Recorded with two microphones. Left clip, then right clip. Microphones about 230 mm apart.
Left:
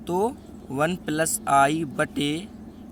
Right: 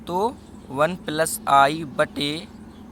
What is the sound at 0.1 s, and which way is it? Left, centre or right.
Speech, left.